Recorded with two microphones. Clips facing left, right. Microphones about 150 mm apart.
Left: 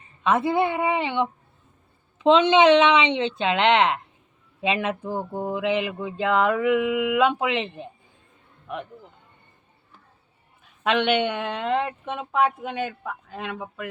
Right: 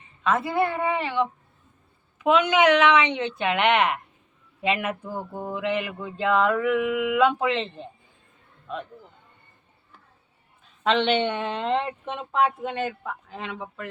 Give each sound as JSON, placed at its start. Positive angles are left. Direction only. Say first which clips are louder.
{"t": 0.2, "sound": "a woman's voice", "louder": "left 2 dB", "side_deg": 20}
{"t": 10.8, "sound": "speech", "louder": "even", "side_deg": 10}